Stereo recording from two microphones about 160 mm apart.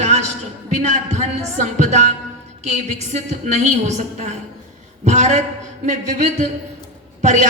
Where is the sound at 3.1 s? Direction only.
45° right (ahead or behind).